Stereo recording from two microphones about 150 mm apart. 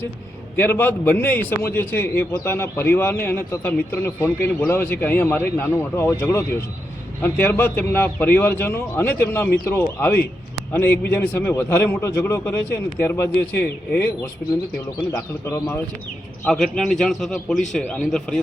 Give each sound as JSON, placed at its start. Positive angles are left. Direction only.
{"t": 0.5, "sound": "a man's voice", "side_deg": 15}
{"t": 15.1, "sound": "a man's voice", "side_deg": 15}
{"t": 16.4, "sound": "a man's voice", "side_deg": 0}